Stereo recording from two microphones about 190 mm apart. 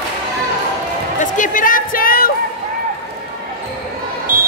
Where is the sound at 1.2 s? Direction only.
45° left (ahead or behind).